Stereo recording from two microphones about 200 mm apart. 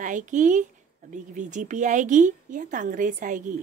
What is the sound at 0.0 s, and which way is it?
Speech, 40° right (ahead or behind).